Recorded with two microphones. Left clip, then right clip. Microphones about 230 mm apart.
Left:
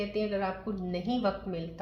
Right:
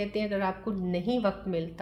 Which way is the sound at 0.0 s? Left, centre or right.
Right.